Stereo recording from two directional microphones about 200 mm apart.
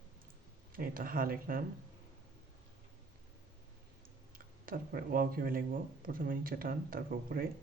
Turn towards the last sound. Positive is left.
turn(degrees=-45)  # may be behind; listen again after turning